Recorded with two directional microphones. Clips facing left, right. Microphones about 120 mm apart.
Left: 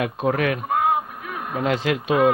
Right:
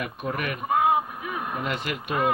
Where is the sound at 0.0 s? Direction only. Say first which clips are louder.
Left 8 dB; 90° left.